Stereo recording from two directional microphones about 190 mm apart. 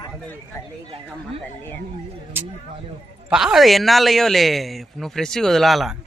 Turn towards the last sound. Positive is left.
turn(degrees=0)  # may be behind; listen again after turning